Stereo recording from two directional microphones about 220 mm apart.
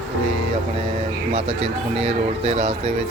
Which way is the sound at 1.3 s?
30° right (ahead or behind).